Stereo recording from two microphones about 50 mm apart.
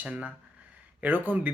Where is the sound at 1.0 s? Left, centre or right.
Right.